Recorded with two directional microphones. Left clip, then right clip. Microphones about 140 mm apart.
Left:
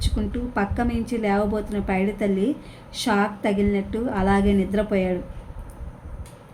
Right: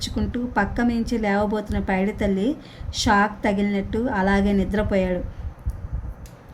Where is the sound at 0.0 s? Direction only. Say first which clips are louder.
Right 2 dB; 45° right (ahead or behind).